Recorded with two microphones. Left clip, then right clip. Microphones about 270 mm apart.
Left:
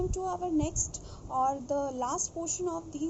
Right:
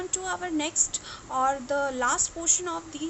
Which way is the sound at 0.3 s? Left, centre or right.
Right.